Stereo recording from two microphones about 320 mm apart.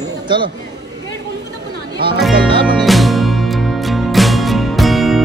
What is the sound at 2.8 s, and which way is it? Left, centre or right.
Music, centre.